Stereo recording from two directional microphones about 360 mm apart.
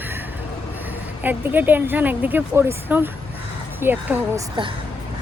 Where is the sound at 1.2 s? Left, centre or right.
Centre.